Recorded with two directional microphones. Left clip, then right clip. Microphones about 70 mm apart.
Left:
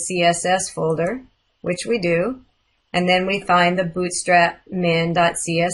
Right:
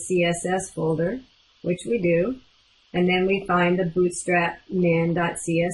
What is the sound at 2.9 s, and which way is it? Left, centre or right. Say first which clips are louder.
Speech: left 3 dB; left.